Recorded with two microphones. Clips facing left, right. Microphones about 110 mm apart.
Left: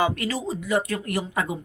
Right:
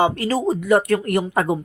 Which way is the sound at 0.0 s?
35° right (ahead or behind).